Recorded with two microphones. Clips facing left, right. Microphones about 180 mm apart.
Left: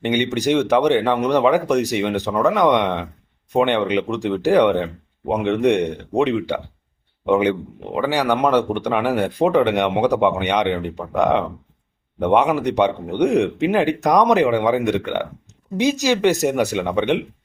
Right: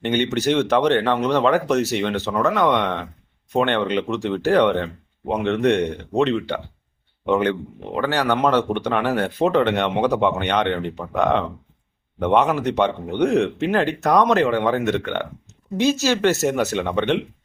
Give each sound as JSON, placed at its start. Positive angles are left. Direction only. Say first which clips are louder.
{"t": 0.0, "sound": "speech", "louder": "left 1 dB", "side_deg": 15}